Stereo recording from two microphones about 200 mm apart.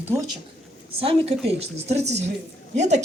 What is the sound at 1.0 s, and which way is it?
A woman's voice, 30° right (ahead or behind).